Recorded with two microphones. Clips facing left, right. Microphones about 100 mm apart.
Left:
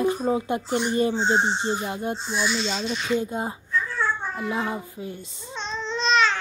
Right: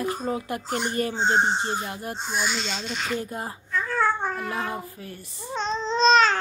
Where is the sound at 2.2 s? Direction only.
50° right (ahead or behind).